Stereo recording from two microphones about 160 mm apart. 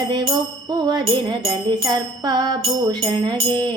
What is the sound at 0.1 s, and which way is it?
Music, 25° right (ahead or behind).